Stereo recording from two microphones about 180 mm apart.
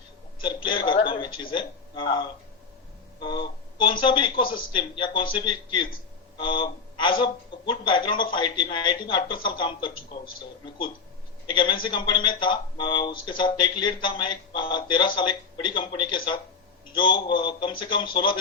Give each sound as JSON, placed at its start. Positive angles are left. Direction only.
{"t": 0.4, "sound": "speech", "side_deg": 25}
{"t": 11.4, "sound": "speech", "side_deg": 25}